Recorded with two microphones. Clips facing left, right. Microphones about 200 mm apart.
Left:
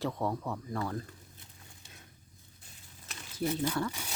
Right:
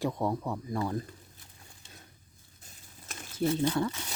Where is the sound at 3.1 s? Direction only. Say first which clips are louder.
Right 3 dB; 45° right (ahead or behind).